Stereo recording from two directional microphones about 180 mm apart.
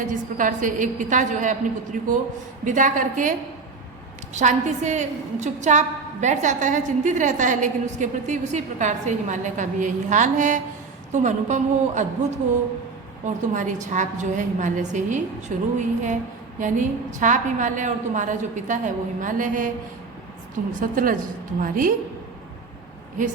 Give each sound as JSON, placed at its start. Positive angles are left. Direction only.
{"t": 0.1, "sound": "a woman's voice", "side_deg": -45}
{"t": 4.4, "sound": "a woman's voice", "side_deg": -40}
{"t": 13.2, "sound": "a woman's voice", "side_deg": -45}
{"t": 20.7, "sound": "a woman's voice", "side_deg": -50}